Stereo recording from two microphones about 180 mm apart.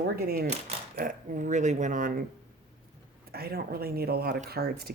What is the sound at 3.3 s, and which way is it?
Speech, 60° right (ahead or behind).